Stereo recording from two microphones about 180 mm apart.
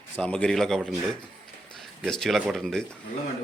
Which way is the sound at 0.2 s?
5° left (ahead or behind).